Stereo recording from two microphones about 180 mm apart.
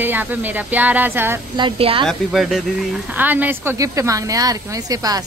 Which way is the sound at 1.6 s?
30° right (ahead or behind).